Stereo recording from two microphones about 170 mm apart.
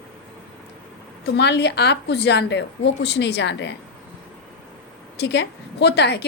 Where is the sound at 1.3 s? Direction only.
85° left.